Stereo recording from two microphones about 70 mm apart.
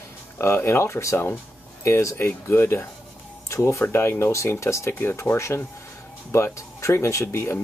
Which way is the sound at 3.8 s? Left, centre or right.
Left.